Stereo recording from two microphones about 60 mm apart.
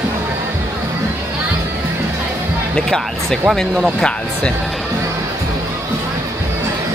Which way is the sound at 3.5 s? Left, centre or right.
Centre.